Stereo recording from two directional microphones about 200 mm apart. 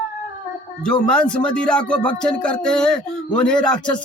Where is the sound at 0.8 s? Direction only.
5° left (ahead or behind).